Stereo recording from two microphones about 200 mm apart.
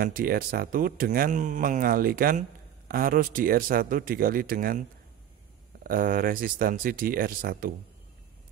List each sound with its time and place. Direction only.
0.0 s speech: 45° right (ahead or behind)
5.9 s speech: 45° right (ahead or behind)